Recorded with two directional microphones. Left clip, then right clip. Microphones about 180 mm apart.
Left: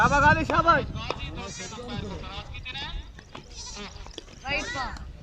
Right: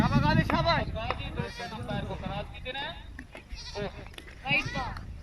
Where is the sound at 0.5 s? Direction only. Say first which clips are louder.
Left 6 dB; 80° left.